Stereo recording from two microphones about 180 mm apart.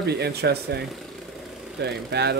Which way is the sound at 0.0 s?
65° right (ahead or behind).